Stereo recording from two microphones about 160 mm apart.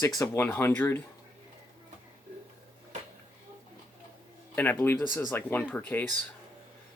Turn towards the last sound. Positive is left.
turn(degrees=10)  # may be behind; listen again after turning